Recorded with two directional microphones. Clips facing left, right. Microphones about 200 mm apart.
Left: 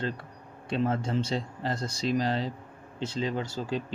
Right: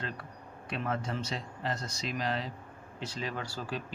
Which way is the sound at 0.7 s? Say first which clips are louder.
Left 7 dB; 30° left (ahead or behind).